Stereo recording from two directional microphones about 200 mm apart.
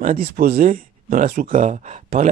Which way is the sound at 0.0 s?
40° right (ahead or behind).